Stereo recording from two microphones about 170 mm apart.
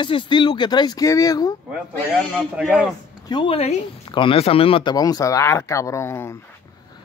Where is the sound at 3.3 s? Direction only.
30° left (ahead or behind); by 6.4 s 15° left (ahead or behind).